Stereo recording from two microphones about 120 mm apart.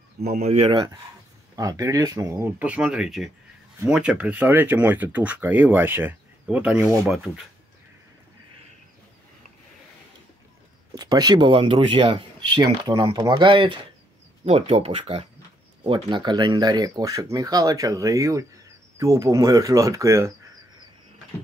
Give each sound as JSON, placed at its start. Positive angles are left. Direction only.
{"t": 0.4, "sound": "speech", "side_deg": -60}
{"t": 1.6, "sound": "speech", "side_deg": -30}
{"t": 2.6, "sound": "speech", "side_deg": -10}
{"t": 11.0, "sound": "speech", "side_deg": -35}
{"t": 14.4, "sound": "speech", "side_deg": -55}
{"t": 15.8, "sound": "speech", "side_deg": -40}